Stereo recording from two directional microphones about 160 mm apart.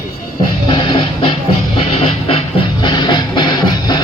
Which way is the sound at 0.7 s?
30° left (ahead or behind).